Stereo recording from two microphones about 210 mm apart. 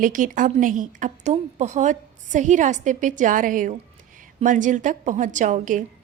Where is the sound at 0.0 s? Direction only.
40° right (ahead or behind).